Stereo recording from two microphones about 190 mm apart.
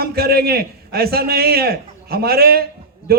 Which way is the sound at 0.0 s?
55° right (ahead or behind).